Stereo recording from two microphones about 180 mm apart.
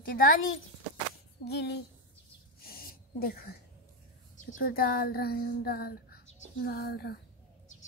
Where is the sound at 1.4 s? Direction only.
65° left (ahead or behind).